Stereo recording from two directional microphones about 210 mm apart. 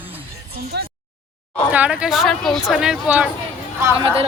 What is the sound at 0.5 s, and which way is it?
Speech, 50° right (ahead or behind).